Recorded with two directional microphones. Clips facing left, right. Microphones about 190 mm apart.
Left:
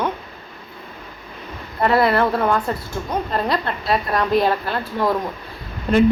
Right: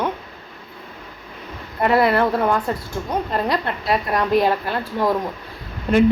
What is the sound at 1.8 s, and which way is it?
A woman's voice, 15° right (ahead or behind).